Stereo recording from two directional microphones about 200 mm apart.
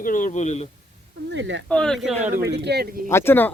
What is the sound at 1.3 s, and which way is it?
Speech, 65° right (ahead or behind).